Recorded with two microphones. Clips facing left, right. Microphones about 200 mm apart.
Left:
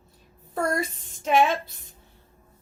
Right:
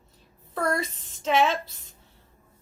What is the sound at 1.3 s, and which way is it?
Speech, 50° left (ahead or behind).